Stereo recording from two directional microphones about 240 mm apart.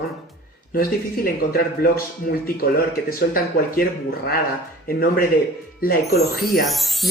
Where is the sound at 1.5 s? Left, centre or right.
Left.